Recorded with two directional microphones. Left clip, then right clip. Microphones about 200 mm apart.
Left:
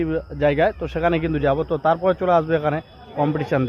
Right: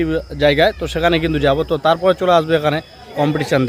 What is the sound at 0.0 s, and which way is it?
Speech, 5° right (ahead or behind).